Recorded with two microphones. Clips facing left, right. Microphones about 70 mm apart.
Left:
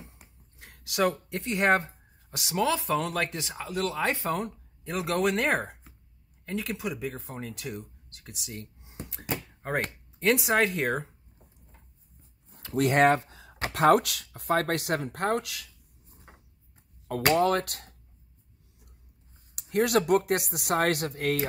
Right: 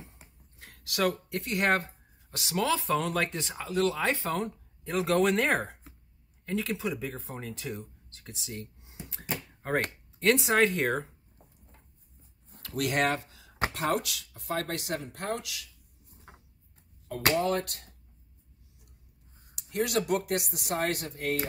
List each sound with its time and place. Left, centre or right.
0.1 s a sound: centre
0.8 s speech: centre
2.6 s speech: centre
12.6 s speech: left
13.7 s speech: left
17.4 s speech: left
19.5 s speech: left